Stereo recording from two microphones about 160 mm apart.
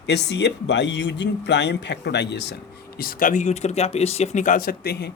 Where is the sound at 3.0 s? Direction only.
60° left (ahead or behind).